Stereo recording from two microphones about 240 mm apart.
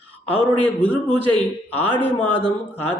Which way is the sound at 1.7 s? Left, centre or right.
Centre.